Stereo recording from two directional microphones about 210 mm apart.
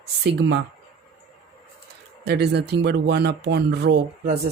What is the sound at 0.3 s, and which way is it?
Speech, 55° right (ahead or behind).